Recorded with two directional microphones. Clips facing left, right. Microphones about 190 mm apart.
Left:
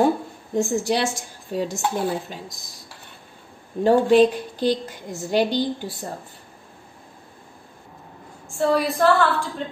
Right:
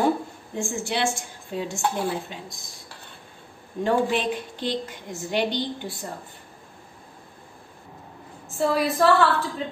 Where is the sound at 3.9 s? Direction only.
40° left (ahead or behind).